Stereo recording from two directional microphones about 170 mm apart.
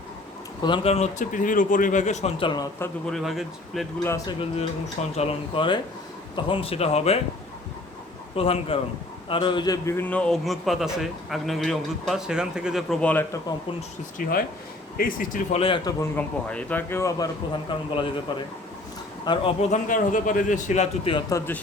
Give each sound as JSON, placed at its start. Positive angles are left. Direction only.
{"t": 0.6, "sound": "a man's voice", "side_deg": 30}
{"t": 2.4, "sound": "speech", "side_deg": 25}
{"t": 3.1, "sound": "speech", "side_deg": 0}
{"t": 4.0, "sound": "speech", "side_deg": 15}
{"t": 5.1, "sound": "speech", "side_deg": 35}
{"t": 8.4, "sound": "speech", "side_deg": 35}
{"t": 14.2, "sound": "speech", "side_deg": 60}
{"t": 15.5, "sound": "speech", "side_deg": 30}
{"t": 16.1, "sound": "speech", "side_deg": 10}
{"t": 17.9, "sound": "speech", "side_deg": 30}
{"t": 19.7, "sound": "a man's voice", "side_deg": 50}
{"t": 21.2, "sound": "speech", "side_deg": 15}